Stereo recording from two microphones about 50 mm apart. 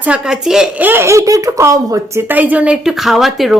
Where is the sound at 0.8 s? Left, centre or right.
Right.